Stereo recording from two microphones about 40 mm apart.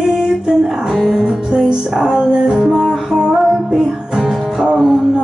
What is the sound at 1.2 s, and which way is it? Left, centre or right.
Music, right.